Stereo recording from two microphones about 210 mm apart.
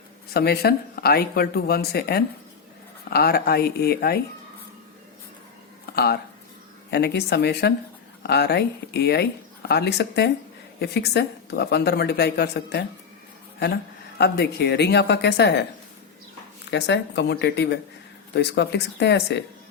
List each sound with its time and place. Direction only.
0.3 s a woman's voice: 50° left (ahead or behind)
5.8 s a sound: 50° left (ahead or behind)
6.9 s a woman's voice: 50° left (ahead or behind)
14.2 s a woman's voice: 50° left (ahead or behind)
16.7 s a woman's voice: 55° left (ahead or behind)